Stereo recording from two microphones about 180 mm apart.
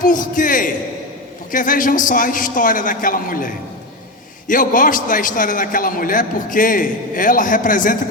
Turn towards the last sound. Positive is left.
turn(degrees=50)  # may be behind; listen again after turning